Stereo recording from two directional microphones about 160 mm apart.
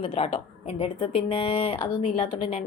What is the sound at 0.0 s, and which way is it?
A woman's voice, 35° left (ahead or behind).